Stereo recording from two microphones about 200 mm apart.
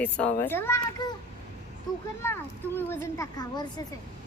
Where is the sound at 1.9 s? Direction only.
20° left (ahead or behind).